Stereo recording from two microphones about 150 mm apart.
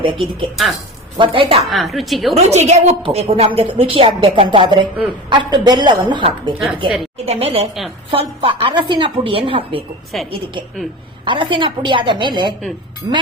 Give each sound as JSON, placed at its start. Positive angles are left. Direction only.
{"t": 0.0, "sound": "a woman's voice", "side_deg": -35}
{"t": 0.5, "sound": "a woman's voice", "side_deg": 0}
{"t": 1.1, "sound": "a woman's voice", "side_deg": -35}
{"t": 1.7, "sound": "a woman's voice", "side_deg": 0}
{"t": 2.3, "sound": "a woman's voice", "side_deg": -50}
{"t": 10.1, "sound": "a woman's voice", "side_deg": 0}
{"t": 11.3, "sound": "a woman's voice", "side_deg": -35}
{"t": 13.0, "sound": "music", "side_deg": -30}